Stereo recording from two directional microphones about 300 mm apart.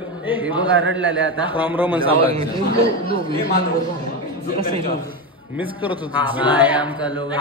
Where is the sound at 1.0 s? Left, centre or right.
Right.